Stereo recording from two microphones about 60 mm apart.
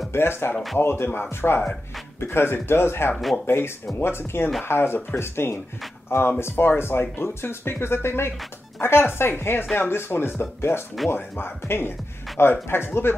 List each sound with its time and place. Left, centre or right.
0.1 s speech: left